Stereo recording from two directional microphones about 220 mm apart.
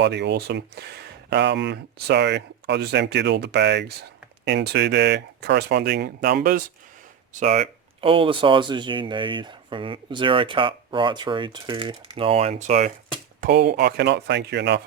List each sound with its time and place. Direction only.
0.0 s speech: 50° right (ahead or behind)
7.3 s speech: 30° right (ahead or behind)
13.4 s speech: 45° right (ahead or behind)